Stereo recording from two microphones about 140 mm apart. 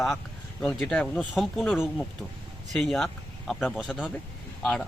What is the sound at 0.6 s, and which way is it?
Speech, 5° left (ahead or behind).